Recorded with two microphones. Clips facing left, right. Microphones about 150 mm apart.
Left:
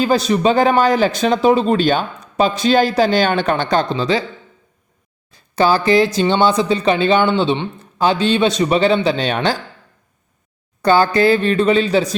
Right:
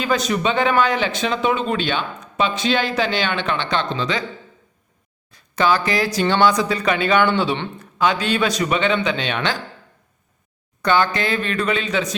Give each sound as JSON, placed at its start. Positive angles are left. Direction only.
{"t": 0.0, "sound": "a man's voice", "side_deg": 35}
{"t": 5.3, "sound": "a man's voice", "side_deg": 30}
{"t": 10.8, "sound": "a man's voice", "side_deg": 35}